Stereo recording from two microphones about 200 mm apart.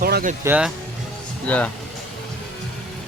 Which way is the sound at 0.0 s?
45° right (ahead or behind).